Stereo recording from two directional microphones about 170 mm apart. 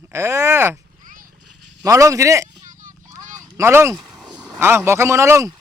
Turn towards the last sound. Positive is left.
turn(degrees=-15)  # may be behind; listen again after turning